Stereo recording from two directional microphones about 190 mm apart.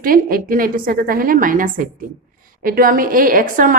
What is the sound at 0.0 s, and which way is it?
A woman's voice, 50° right (ahead or behind).